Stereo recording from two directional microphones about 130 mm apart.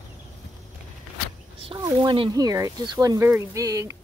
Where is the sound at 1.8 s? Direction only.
30° right (ahead or behind).